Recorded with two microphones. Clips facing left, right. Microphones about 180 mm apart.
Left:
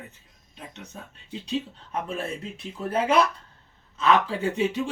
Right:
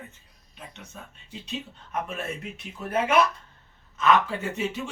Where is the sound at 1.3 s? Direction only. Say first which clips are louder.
Left 7 dB; 30° left (ahead or behind).